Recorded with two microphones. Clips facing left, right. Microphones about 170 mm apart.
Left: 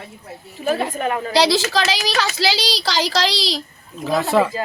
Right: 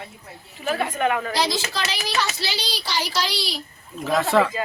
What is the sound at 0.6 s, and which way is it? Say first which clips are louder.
Speech: left 2 dB; 35° left (ahead or behind).